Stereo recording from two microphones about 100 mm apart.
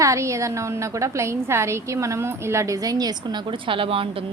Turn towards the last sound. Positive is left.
turn(degrees=-65)  # may be behind; listen again after turning